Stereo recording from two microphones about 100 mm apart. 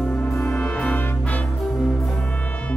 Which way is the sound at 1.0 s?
20° left (ahead or behind).